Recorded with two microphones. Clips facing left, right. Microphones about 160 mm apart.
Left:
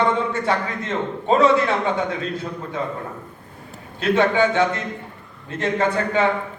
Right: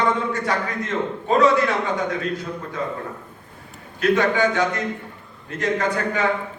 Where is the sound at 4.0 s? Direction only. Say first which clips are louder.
Left 1 dB; 25° left (ahead or behind).